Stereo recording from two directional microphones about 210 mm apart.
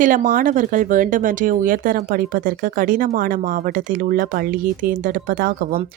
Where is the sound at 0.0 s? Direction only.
40° right (ahead or behind).